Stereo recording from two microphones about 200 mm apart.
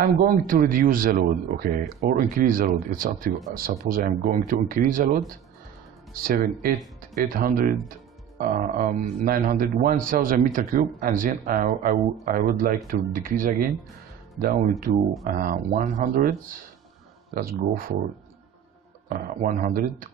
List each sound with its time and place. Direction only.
0.0 s a man's voice: 45° right (ahead or behind)
14.9 s a man's voice: 45° right (ahead or behind)
19.0 s a man's voice: 45° right (ahead or behind)